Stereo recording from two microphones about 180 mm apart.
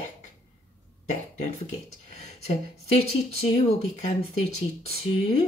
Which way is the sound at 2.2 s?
35° left (ahead or behind).